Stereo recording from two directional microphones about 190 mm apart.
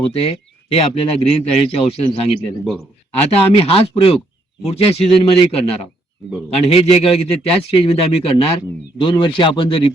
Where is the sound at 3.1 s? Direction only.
30° left (ahead or behind).